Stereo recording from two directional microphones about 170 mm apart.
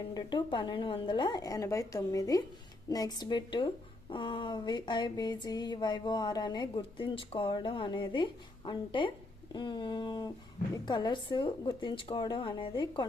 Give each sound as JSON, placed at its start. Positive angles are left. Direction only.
{"t": 0.1, "sound": "speech", "side_deg": 25}